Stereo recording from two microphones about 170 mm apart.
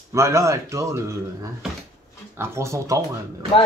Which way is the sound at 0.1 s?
15° right (ahead or behind).